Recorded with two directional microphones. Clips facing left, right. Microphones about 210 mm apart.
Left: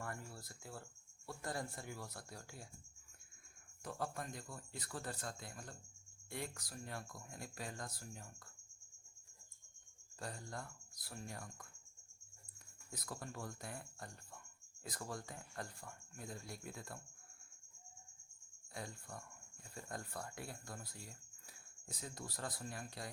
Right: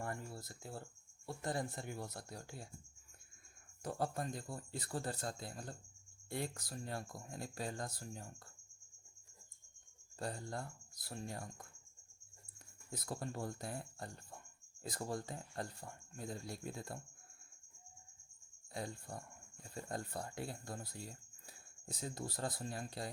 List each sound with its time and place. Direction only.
0.0 s a sound: 25° right (ahead or behind)
1.3 s speech: 20° right (ahead or behind)
3.8 s speech: 35° right (ahead or behind)
10.2 s speech: 30° right (ahead or behind)
12.9 s speech: 25° right (ahead or behind)
18.7 s speech: 30° right (ahead or behind)